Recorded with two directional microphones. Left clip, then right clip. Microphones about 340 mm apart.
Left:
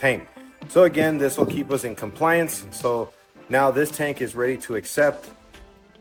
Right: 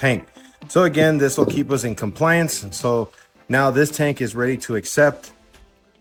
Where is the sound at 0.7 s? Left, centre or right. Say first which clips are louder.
Right 1 dB; right.